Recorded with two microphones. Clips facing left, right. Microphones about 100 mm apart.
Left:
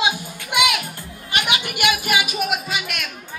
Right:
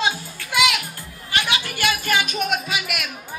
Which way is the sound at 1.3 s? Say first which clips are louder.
Left 1 dB; 20° left (ahead or behind).